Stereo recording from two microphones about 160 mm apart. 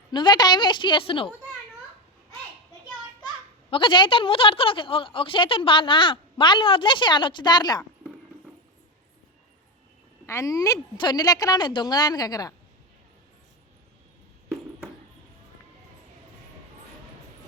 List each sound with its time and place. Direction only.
0.1 s a woman's voice: 30° left (ahead or behind)
3.7 s a woman's voice: 30° left (ahead or behind)
10.2 s a woman's voice: 20° left (ahead or behind)